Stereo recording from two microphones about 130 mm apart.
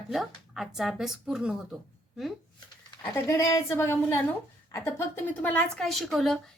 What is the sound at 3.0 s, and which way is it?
A woman's voice, 20° left (ahead or behind).